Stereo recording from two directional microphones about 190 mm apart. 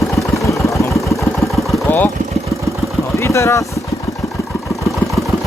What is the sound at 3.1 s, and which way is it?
Vehicle, 15° left (ahead or behind).